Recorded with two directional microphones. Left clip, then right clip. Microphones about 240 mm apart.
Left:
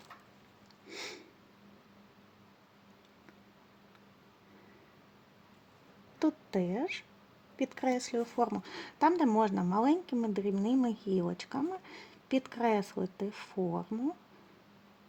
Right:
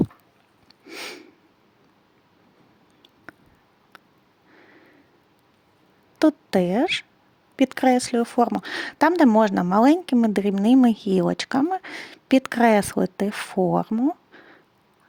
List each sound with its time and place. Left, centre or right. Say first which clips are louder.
0.9 s snort: right 9 dB; right
6.1 s speech: right 13 dB; right